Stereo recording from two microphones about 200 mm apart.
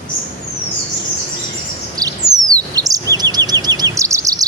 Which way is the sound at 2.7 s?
15° right (ahead or behind).